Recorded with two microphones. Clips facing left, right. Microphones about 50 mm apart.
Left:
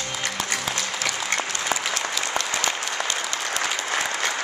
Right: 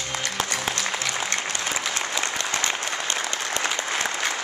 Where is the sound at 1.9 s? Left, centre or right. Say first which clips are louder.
Even; right.